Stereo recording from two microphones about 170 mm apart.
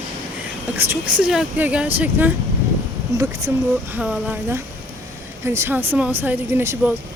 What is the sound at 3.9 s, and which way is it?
Speech, 5° right (ahead or behind).